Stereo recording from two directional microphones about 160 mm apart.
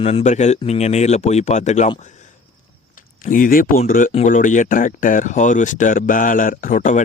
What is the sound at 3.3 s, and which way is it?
Speech, 60° left (ahead or behind).